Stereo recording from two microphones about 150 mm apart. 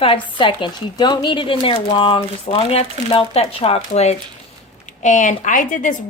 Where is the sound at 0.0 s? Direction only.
35° left (ahead or behind).